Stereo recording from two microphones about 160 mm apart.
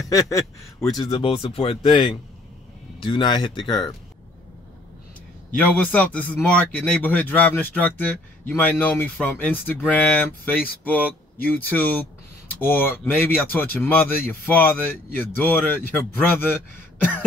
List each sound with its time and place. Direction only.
0.8 s speech: 25° left (ahead or behind)
5.6 s a man's voice: 10° left (ahead or behind)